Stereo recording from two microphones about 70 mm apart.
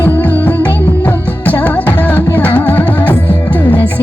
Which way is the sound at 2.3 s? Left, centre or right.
Left.